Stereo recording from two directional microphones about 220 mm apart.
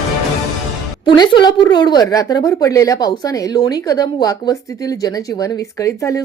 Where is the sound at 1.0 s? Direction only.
20° left (ahead or behind).